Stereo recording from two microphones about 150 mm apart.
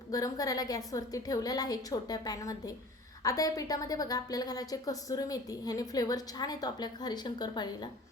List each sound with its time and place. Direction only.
0.1 s a woman's voice: 25° left (ahead or behind)